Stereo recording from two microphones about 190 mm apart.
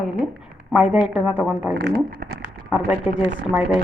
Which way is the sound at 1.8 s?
65° right (ahead or behind).